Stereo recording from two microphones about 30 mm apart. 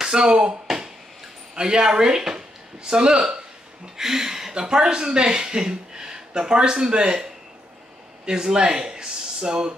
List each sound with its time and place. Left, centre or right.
0.0 s speech: right
1.5 s speech: right
3.9 s speech: centre
8.3 s speech: right